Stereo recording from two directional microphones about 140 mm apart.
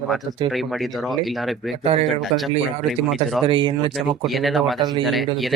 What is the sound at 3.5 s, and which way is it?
Speech, 35° right (ahead or behind).